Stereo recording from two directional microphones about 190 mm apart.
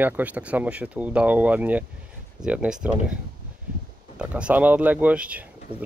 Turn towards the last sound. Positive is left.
turn(degrees=-5)  # may be behind; listen again after turning